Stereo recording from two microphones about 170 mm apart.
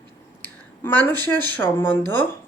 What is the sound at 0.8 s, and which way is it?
Speech, 10° left (ahead or behind).